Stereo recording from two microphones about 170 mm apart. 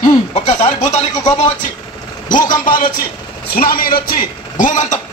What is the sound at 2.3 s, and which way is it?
A man's voice, 50° left (ahead or behind).